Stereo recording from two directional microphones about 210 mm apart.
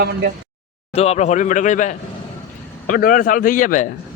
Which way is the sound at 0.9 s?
30° left (ahead or behind).